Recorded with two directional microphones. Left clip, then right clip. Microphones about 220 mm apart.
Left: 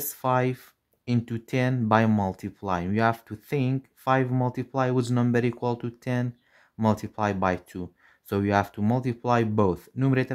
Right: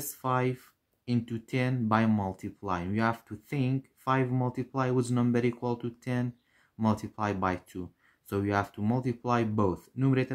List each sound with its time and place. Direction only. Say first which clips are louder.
0.0 s speech: left 5 dB; 35° left (ahead or behind)